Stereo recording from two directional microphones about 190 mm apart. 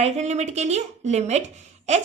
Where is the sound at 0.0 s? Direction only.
35° right (ahead or behind).